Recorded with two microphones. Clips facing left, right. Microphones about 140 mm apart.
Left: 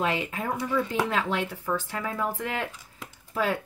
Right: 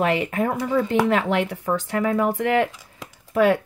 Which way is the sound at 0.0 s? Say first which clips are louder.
Right 7 dB; 65° right (ahead or behind).